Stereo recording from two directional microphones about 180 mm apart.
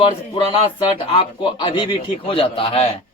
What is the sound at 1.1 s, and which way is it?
A man's voice, 30° left (ahead or behind).